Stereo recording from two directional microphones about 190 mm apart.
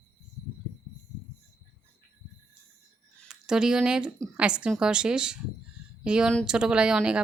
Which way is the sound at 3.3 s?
5° right (ahead or behind).